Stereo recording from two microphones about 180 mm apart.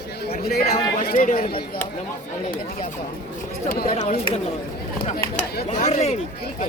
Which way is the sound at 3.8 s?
40° left (ahead or behind).